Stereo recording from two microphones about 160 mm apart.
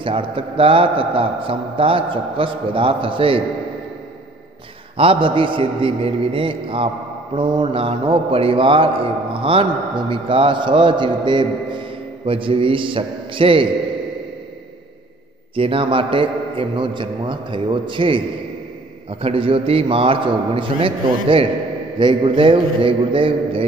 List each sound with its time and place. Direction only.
0.0 s a man's voice: 30° right (ahead or behind)
4.9 s a man's voice: 35° right (ahead or behind)
15.5 s a man's voice: 35° right (ahead or behind)
19.2 s a man's voice: 35° right (ahead or behind)